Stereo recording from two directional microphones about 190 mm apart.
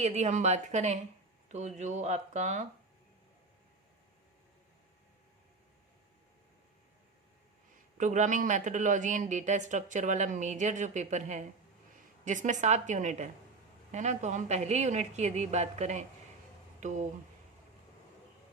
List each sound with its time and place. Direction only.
0.0 s speech: 35° right (ahead or behind)
7.9 s speech: 40° right (ahead or behind)